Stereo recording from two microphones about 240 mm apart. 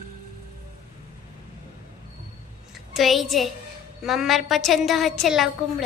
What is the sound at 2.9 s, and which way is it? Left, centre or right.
A woman's voice, centre.